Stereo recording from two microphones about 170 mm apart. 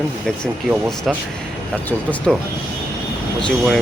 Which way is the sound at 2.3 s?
Centre (ahead or behind).